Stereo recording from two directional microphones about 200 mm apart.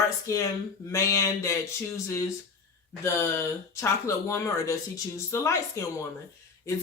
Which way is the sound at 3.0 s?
15° left (ahead or behind).